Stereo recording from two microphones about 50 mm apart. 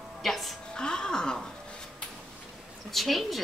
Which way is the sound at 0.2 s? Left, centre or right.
Centre.